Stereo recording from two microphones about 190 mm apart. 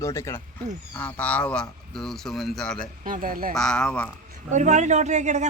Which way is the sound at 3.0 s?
45° right (ahead or behind).